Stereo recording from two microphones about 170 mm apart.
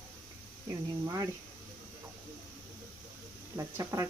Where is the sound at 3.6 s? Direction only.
15° right (ahead or behind).